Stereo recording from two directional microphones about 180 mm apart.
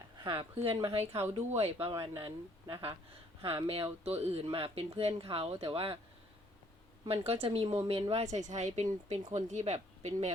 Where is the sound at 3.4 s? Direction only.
30° right (ahead or behind).